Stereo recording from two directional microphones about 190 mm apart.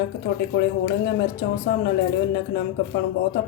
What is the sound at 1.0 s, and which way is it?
A woman's voice, 55° left (ahead or behind).